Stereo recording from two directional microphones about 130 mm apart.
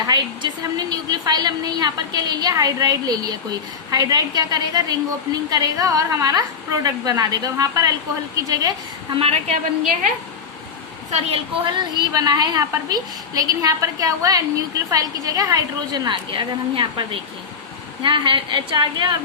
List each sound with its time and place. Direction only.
0.1 s a woman's voice: 30° right (ahead or behind)
9.1 s a woman's voice: 50° right (ahead or behind)
11.1 s a woman's voice: 50° right (ahead or behind)